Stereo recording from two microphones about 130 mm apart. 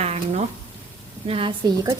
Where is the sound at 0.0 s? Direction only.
55° right (ahead or behind).